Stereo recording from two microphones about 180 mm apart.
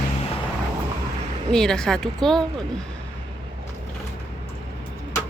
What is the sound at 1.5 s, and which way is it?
Speech, 5° left (ahead or behind).